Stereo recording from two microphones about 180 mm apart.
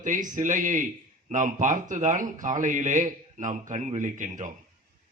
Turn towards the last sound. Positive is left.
turn(degrees=-45)  # may be behind; listen again after turning